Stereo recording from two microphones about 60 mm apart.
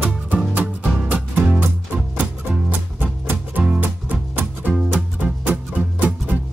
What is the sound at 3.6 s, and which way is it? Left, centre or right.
Music, right.